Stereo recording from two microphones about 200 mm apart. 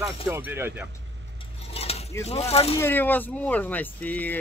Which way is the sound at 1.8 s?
30° left (ahead or behind).